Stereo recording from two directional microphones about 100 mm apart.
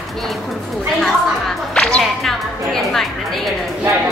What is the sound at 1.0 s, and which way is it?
Speech, 5° left (ahead or behind).